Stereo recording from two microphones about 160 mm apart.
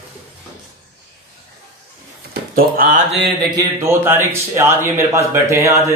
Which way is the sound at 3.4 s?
25° right (ahead or behind).